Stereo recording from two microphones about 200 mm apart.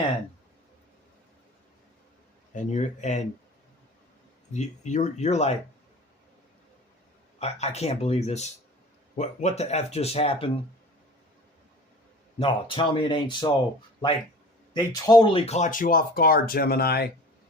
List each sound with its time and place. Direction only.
2.6 s speech: 35° left (ahead or behind)
4.5 s speech: 35° left (ahead or behind)
7.3 s speech: 35° left (ahead or behind)
12.4 s speech: 25° left (ahead or behind)
14.7 s speech: 20° left (ahead or behind); by 17.1 s 50° left (ahead or behind)